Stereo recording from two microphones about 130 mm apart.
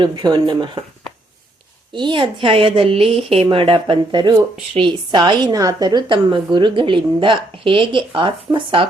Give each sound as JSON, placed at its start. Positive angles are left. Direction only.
{"t": 0.0, "sound": "a woman's voice", "side_deg": -35}
{"t": 1.9, "sound": "a woman's voice", "side_deg": -35}